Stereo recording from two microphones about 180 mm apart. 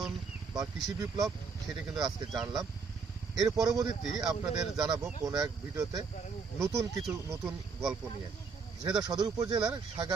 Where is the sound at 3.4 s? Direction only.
20° right (ahead or behind).